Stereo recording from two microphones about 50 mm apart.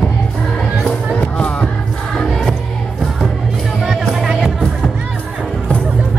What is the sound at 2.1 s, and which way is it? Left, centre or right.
Music, centre.